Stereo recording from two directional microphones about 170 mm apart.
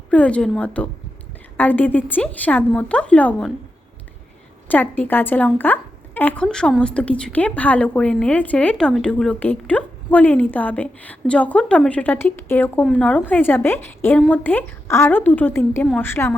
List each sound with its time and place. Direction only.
0.1 s a woman's voice: 5° left (ahead or behind)
4.7 s a woman's voice: 10° left (ahead or behind)